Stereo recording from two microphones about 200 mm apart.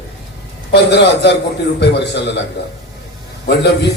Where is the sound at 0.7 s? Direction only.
55° left (ahead or behind).